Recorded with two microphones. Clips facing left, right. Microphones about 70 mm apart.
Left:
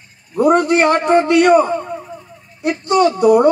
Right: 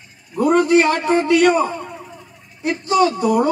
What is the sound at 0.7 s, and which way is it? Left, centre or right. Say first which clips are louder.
Speech: left 2 dB; left.